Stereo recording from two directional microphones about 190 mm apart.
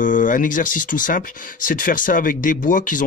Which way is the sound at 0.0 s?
45° left (ahead or behind).